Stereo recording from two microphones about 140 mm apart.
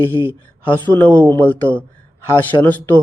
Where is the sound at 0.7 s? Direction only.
15° left (ahead or behind).